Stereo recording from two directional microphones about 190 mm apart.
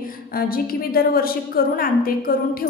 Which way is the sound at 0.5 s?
50° left (ahead or behind).